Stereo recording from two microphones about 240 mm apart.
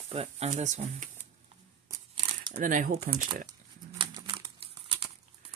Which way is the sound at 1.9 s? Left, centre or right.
Centre.